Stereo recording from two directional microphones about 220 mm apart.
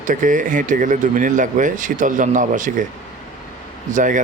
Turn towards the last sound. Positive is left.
turn(degrees=-35)  # may be behind; listen again after turning